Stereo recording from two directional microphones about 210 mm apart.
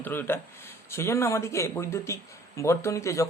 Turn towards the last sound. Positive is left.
turn(degrees=15)  # may be behind; listen again after turning